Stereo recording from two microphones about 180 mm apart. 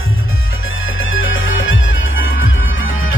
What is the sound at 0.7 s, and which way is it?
Music, 90° left.